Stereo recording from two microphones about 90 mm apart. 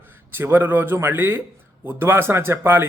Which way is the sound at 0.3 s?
25° right (ahead or behind).